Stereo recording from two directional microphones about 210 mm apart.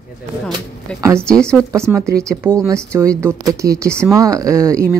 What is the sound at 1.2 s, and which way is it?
Speech, 5° left (ahead or behind).